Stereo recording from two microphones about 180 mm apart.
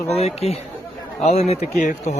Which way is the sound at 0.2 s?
35° left (ahead or behind).